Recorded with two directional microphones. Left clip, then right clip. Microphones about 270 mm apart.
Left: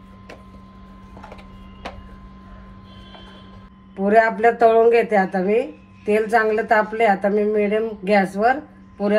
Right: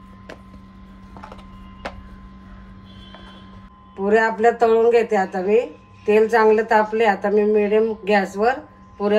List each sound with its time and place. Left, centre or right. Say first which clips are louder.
4.0 s speech: left 1 dB; left